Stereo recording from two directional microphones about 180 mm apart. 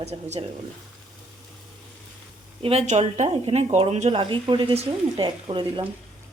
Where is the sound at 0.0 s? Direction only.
35° right (ahead or behind).